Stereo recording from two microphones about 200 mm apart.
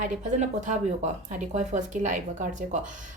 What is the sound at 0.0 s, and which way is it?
Speech, 35° right (ahead or behind).